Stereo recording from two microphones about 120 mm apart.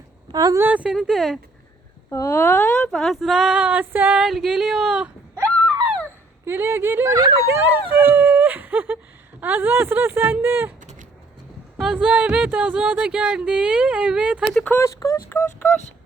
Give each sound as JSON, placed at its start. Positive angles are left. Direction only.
{"t": 0.3, "sound": "speech", "side_deg": -30}
{"t": 0.6, "sound": "speech", "side_deg": -10}
{"t": 0.9, "sound": "speech", "side_deg": 0}
{"t": 2.0, "sound": "speech", "side_deg": 20}
{"t": 4.3, "sound": "speech", "side_deg": 0}
{"t": 6.4, "sound": "speech", "side_deg": -20}
{"t": 11.8, "sound": "speech", "side_deg": -5}
{"t": 14.5, "sound": "speech", "side_deg": 15}